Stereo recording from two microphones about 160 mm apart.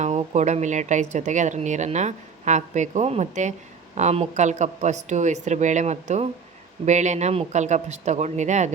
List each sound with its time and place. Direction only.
0.0 s speech: 45° right (ahead or behind)